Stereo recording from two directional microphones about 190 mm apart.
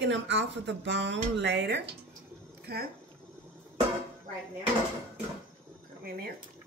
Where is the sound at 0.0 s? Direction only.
70° right (ahead or behind).